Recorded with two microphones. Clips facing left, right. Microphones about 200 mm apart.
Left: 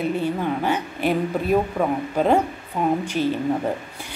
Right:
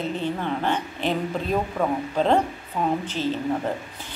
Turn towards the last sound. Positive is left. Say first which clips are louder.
# left 3 dB
turn(degrees=10)  # may be behind; listen again after turning